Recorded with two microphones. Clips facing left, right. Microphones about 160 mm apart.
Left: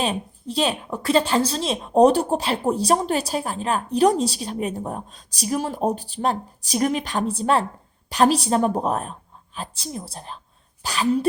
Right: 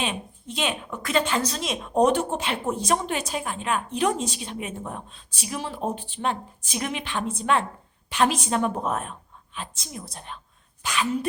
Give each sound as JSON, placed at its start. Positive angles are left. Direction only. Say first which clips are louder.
{"t": 0.0, "sound": "a woman's voice", "louder": "left 5 dB", "side_deg": 35}